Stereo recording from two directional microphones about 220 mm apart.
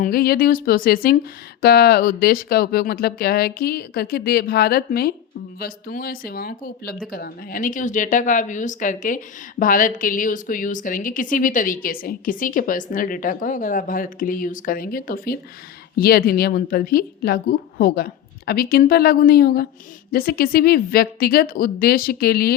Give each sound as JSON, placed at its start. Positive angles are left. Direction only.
{"t": 0.0, "sound": "a woman's voice", "side_deg": 45}